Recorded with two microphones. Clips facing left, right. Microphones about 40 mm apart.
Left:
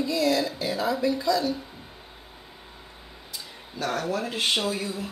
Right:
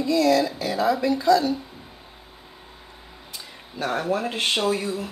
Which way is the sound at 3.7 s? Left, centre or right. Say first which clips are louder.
Right 3 dB; right.